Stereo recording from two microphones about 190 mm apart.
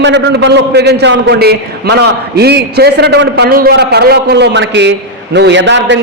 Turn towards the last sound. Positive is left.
turn(degrees=-70)  # may be behind; listen again after turning